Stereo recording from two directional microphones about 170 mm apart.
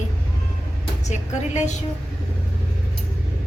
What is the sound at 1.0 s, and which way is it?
Speech, 45° left (ahead or behind).